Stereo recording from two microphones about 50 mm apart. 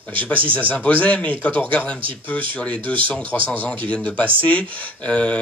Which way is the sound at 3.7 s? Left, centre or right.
Left.